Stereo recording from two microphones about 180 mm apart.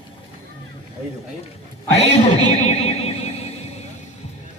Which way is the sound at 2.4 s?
35° left (ahead or behind).